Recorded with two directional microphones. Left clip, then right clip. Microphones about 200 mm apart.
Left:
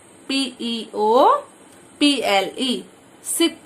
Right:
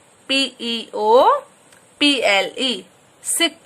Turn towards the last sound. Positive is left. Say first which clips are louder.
# right 1 dB
turn(degrees=-15)  # may be behind; listen again after turning